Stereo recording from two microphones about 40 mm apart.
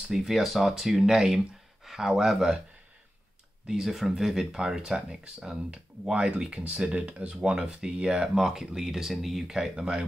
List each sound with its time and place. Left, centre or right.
0.3 s speech: centre
3.6 s speech: centre; by 7.3 s right
7.3 s speech: right